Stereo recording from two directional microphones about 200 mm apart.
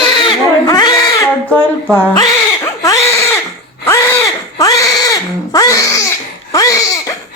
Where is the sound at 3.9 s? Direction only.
15° left (ahead or behind).